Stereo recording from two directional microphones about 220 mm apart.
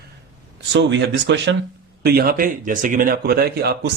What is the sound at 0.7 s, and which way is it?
Speech, 55° right (ahead or behind).